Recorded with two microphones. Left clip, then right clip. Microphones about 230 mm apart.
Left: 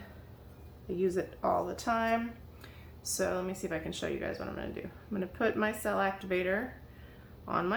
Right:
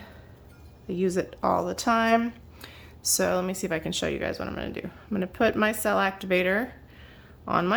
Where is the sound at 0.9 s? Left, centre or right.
Right.